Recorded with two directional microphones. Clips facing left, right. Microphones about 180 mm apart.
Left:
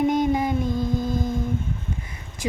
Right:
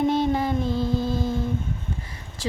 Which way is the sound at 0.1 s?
15° left (ahead or behind).